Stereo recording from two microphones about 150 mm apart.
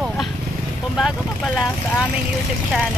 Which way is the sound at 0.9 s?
Centre (ahead or behind).